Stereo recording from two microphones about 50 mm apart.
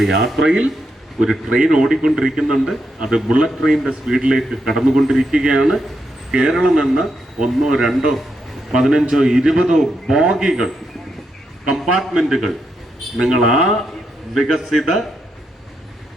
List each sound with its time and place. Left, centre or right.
0.0 s a man's voice: centre
0.4 s a man's voice: centre
6.7 s a man's voice: centre
11.7 s a man's voice: centre